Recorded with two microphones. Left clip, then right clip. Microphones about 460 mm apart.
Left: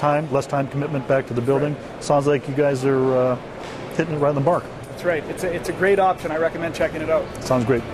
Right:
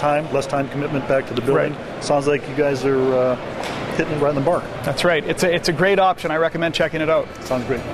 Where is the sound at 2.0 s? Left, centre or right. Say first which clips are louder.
Even; left.